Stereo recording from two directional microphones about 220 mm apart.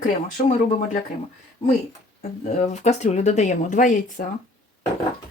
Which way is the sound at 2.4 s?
30° left (ahead or behind).